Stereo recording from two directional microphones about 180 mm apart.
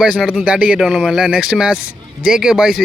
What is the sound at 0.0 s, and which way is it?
Speech, 5° right (ahead or behind).